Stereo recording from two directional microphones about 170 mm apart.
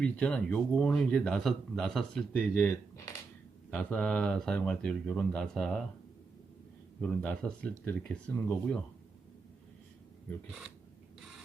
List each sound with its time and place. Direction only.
0.0 s speech: 5° left (ahead or behind)
7.0 s speech: 10° left (ahead or behind)